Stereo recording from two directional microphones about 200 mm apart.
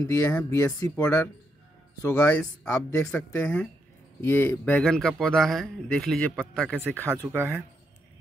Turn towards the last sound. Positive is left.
turn(degrees=-10)  # may be behind; listen again after turning